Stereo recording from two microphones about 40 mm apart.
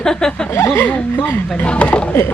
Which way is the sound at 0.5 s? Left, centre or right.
Left.